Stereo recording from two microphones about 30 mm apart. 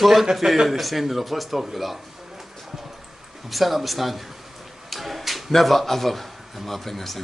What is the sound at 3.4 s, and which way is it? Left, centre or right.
Speech, centre.